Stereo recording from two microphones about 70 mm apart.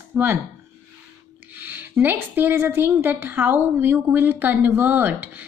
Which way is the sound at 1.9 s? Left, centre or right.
Right.